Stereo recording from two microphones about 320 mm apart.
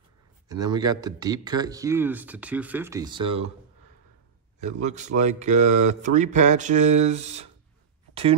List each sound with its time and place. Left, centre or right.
0.5 s speech: centre
4.6 s speech: right
8.1 s a sound: centre